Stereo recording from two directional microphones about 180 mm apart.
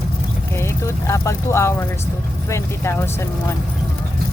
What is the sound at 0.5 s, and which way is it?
Speech, 15° left (ahead or behind).